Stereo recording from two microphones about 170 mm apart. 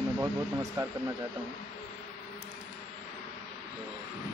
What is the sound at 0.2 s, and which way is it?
Speech, 20° right (ahead or behind).